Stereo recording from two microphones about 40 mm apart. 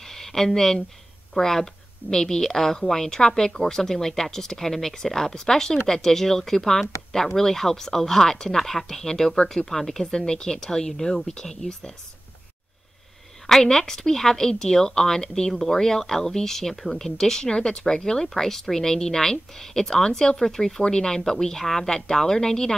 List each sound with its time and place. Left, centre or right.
0.0 s a sound: centre
1.3 s speech: centre
13.5 s speech: centre
18.3 s speech: centre